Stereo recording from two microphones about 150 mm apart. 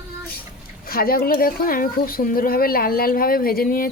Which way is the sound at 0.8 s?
80° left.